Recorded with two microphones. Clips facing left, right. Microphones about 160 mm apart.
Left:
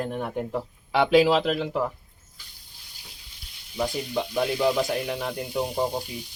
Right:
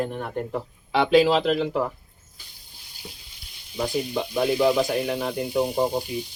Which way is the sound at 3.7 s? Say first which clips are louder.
Right 1 dB; 5° right (ahead or behind).